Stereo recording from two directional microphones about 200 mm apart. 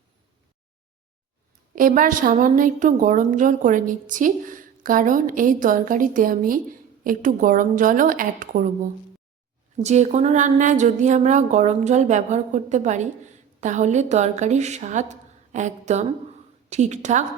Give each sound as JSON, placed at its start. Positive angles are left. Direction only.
{"t": 1.7, "sound": "a woman's voice", "side_deg": -45}
{"t": 9.7, "sound": "a woman's voice", "side_deg": -35}